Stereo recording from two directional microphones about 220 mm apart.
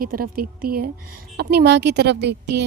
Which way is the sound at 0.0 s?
40° right (ahead or behind).